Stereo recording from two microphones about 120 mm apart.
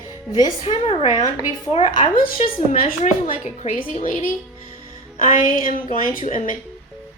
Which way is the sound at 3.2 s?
70° left (ahead or behind).